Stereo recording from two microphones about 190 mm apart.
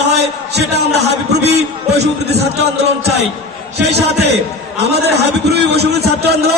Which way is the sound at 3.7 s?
60° right (ahead or behind).